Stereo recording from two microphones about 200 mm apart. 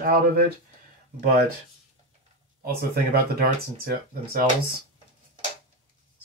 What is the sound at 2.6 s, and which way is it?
Speech, 45° right (ahead or behind).